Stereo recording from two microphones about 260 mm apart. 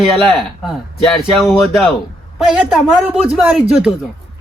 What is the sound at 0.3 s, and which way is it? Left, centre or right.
Speech, centre.